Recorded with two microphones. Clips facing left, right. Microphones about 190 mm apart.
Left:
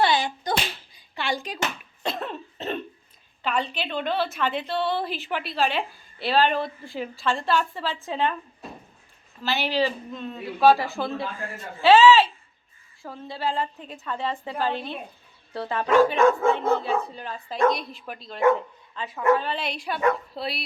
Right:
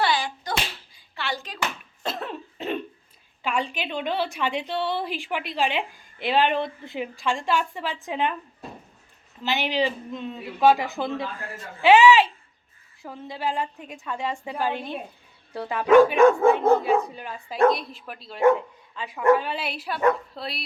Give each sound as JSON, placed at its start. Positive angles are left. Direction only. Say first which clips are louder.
{"t": 0.0, "sound": "a sound", "louder": "left 2 dB", "side_deg": 25}
{"t": 2.0, "sound": "cough", "louder": "left 1 dB", "side_deg": -5}
{"t": 3.4, "sound": "a woman's voice", "louder": "even", "side_deg": -10}
{"t": 9.4, "sound": "a woman's voice", "louder": "even", "side_deg": -15}
{"t": 17.7, "sound": "a woman's voice", "louder": "right 2 dB", "side_deg": 0}